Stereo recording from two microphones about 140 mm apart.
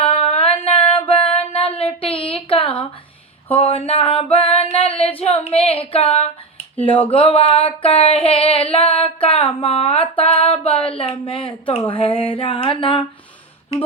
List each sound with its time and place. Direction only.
0.0 s music: 45° left (ahead or behind)
3.5 s female singing: 45° left (ahead or behind)
5.2 s a sound: 45° left (ahead or behind)